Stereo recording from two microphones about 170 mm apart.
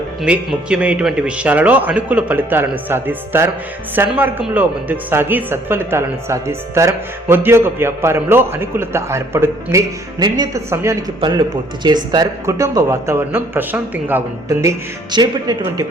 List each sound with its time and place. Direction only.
0.2 s speech: 5° right (ahead or behind); by 15.9 s 25° right (ahead or behind)